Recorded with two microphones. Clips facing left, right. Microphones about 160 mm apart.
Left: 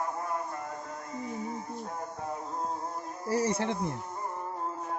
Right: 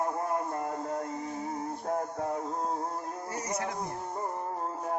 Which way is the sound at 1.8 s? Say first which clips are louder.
Right 6 dB; 55° right (ahead or behind).